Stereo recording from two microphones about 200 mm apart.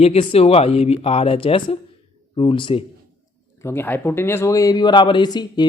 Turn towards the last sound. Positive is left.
turn(degrees=20)  # may be behind; listen again after turning